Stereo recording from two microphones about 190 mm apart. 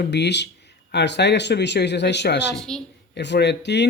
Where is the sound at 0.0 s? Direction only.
65° left (ahead or behind).